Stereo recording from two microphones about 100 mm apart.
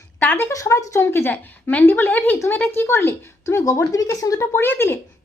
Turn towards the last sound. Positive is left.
turn(degrees=20)  # may be behind; listen again after turning